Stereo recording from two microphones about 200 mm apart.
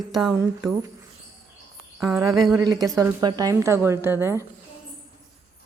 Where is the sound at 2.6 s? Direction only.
15° right (ahead or behind).